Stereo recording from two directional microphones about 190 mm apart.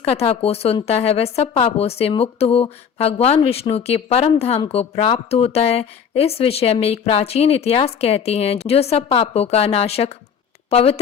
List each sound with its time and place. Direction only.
0.0 s speech: 30° left (ahead or behind)